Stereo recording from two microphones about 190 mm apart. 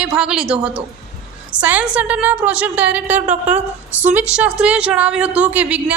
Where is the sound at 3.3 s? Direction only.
35° right (ahead or behind).